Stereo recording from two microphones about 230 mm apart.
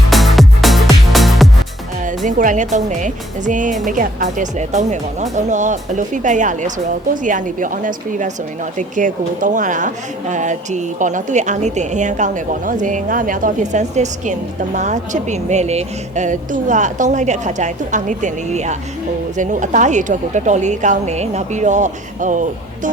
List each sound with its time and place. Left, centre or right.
0.1 s music: centre
2.0 s speech: right